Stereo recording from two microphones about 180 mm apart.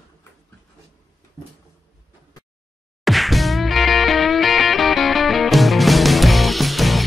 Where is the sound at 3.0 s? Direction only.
Centre (ahead or behind).